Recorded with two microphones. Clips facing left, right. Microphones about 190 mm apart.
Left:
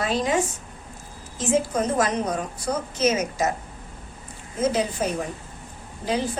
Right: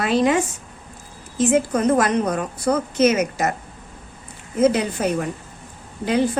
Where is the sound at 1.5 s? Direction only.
65° right (ahead or behind).